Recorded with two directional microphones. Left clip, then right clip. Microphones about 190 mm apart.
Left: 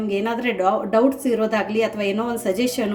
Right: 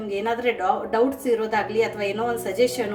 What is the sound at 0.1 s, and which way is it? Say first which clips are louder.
A woman's voice: even; 40° left (ahead or behind).